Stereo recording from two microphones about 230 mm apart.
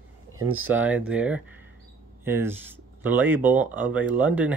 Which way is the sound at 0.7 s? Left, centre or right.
Centre.